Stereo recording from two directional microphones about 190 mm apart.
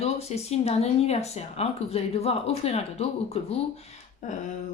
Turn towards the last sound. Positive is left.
turn(degrees=40)  # may be behind; listen again after turning